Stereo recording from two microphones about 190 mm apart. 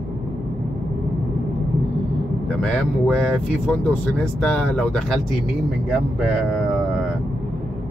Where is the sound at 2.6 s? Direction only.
5° left (ahead or behind).